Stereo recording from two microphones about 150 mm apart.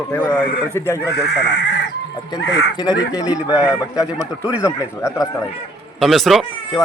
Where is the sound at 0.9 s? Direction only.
20° left (ahead or behind).